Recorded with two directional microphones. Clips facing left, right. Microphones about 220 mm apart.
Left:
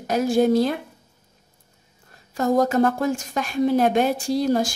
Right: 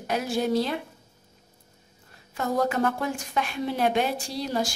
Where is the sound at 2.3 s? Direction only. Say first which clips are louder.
Left 6 dB; 40° left (ahead or behind).